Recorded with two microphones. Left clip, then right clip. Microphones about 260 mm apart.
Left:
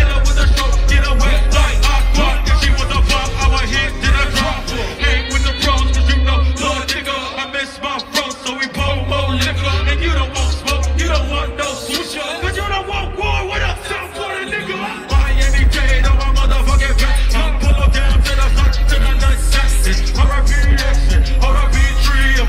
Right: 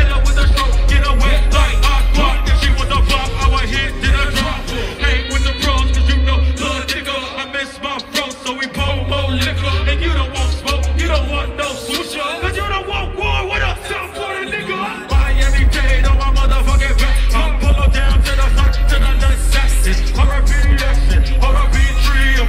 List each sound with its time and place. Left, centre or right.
0.4 s music: centre
10.7 s music: centre
16.6 s music: right
21.4 s music: right